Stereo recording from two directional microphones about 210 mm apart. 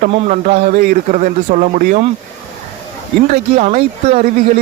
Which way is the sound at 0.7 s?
50° right (ahead or behind).